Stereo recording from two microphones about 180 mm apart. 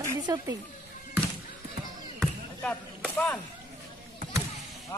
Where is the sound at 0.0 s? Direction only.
20° right (ahead or behind).